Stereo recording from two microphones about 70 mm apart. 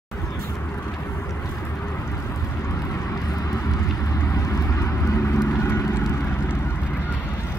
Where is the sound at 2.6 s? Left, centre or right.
Left.